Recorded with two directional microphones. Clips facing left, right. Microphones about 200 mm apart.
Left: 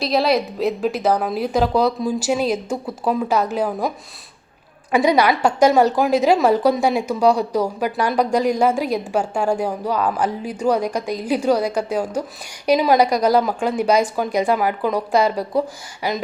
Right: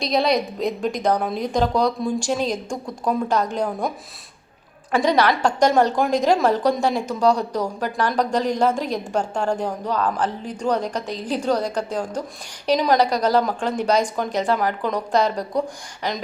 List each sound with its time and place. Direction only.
0.0 s a woman's voice: centre (ahead or behind)